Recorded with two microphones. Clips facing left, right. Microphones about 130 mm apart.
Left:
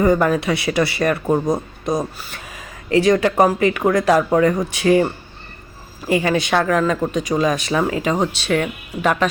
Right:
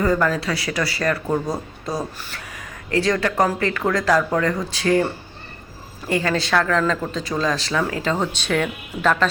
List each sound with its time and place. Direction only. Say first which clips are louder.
0.0 s speech: left 4 dB; 20° left (ahead or behind)
6.1 s speech: left 3 dB; 20° left (ahead or behind)